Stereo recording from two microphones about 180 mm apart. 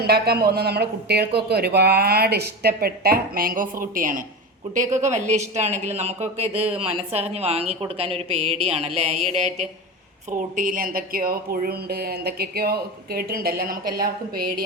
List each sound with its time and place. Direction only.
0.0 s a woman's voice: 60° right (ahead or behind); by 6.5 s 35° right (ahead or behind)
6.5 s speech: 10° right (ahead or behind)
6.7 s a woman's voice: 35° right (ahead or behind)
10.3 s speech: 50° right (ahead or behind)